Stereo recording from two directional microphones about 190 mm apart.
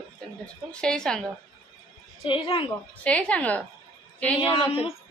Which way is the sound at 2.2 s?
25° left (ahead or behind).